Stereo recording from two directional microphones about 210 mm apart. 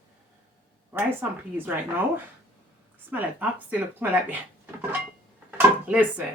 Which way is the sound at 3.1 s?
10° right (ahead or behind).